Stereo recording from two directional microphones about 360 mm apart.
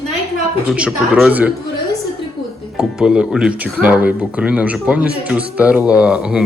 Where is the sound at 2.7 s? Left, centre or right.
Centre.